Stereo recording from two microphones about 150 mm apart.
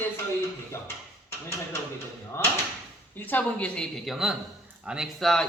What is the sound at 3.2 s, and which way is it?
A woman's voice, 10° left (ahead or behind).